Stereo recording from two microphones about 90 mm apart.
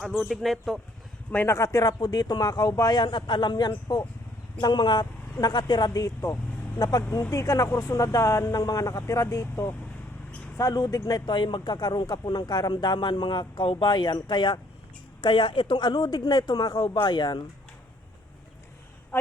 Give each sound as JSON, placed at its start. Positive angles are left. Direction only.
{"t": 0.2, "sound": "speech", "side_deg": 0}
{"t": 1.3, "sound": "a man's voice", "side_deg": 20}
{"t": 1.5, "sound": "a man's voice", "side_deg": 40}